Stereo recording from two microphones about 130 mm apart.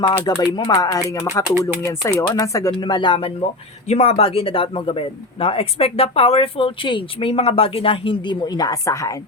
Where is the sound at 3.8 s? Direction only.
55° left (ahead or behind); by 9.2 s 25° left (ahead or behind).